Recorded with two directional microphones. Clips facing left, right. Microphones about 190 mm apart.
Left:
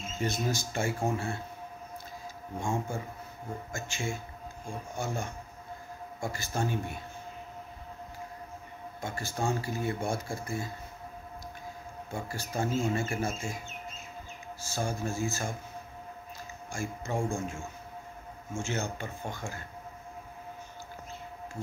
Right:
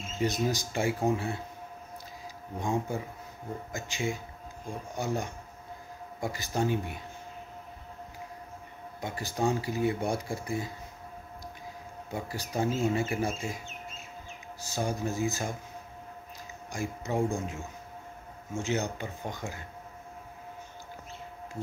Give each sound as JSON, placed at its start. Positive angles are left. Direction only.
{"t": 0.2, "sound": "speech", "side_deg": -15}
{"t": 2.6, "sound": "speech", "side_deg": -15}
{"t": 9.0, "sound": "speech", "side_deg": -15}
{"t": 12.1, "sound": "speech", "side_deg": -15}
{"t": 14.6, "sound": "speech", "side_deg": -15}
{"t": 16.7, "sound": "speech", "side_deg": -15}